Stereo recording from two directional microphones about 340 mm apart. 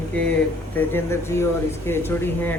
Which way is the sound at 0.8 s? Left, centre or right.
Centre.